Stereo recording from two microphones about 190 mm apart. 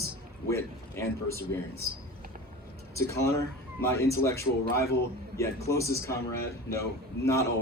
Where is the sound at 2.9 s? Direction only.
15° left (ahead or behind).